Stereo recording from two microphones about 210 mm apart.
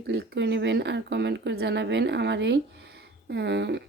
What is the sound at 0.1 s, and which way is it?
Speech, 55° right (ahead or behind).